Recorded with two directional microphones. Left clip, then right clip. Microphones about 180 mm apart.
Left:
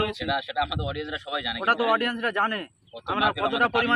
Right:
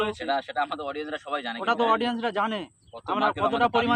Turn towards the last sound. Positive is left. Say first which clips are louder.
# even
turn(degrees=-70)  # may be behind; listen again after turning